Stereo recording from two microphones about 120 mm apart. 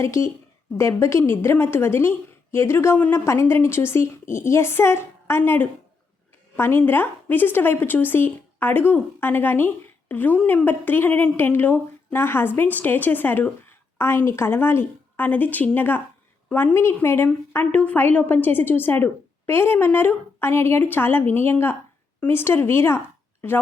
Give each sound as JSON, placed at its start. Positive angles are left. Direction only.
{"t": 0.0, "sound": "a woman's voice", "side_deg": 25}